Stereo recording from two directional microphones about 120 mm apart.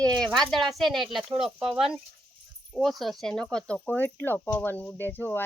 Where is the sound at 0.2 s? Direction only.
5° left (ahead or behind).